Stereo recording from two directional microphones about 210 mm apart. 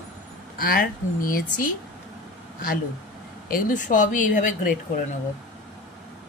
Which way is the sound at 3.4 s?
40° left (ahead or behind).